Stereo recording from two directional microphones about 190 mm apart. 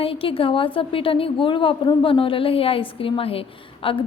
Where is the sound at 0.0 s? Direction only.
30° left (ahead or behind).